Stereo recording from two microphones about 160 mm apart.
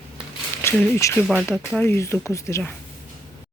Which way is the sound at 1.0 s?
20° left (ahead or behind).